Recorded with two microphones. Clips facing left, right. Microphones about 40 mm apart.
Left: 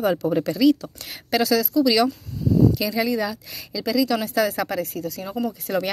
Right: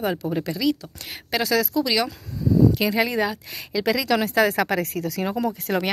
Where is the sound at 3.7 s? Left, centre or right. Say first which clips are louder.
Even; right.